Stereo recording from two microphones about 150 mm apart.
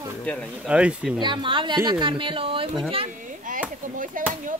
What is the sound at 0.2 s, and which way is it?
Speech, 5° left (ahead or behind).